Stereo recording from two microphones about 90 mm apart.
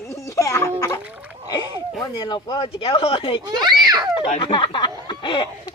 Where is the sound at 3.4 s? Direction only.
50° right (ahead or behind).